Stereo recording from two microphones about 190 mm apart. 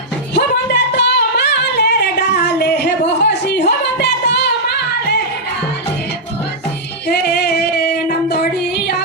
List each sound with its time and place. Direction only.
0.3 s singing: 65° left (ahead or behind)
7.1 s music: 60° left (ahead or behind)